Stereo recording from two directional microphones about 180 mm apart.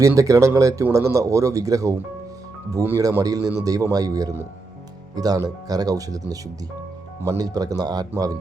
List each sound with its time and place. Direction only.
0.0 s speech: 15° right (ahead or behind)